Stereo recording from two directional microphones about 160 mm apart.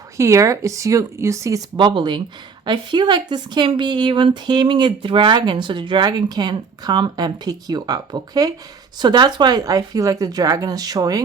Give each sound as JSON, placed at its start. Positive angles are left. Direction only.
{"t": 0.2, "sound": "speech", "side_deg": -20}